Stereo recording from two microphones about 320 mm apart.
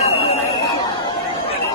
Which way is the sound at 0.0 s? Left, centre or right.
Centre.